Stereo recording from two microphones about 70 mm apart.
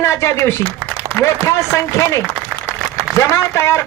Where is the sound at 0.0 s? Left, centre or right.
Left.